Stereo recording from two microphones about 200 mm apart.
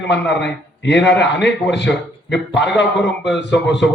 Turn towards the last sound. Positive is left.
turn(degrees=60)  # may be behind; listen again after turning